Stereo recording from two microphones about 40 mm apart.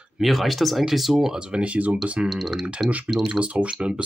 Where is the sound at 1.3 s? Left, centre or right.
Right.